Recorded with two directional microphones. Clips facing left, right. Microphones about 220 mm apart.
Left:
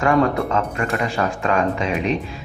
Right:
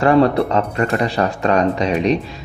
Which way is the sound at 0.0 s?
35° right (ahead or behind).